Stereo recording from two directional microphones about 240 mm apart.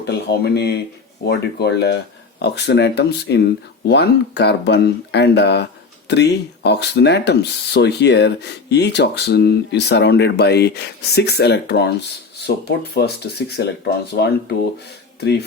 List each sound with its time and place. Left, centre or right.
0.0 s speech: left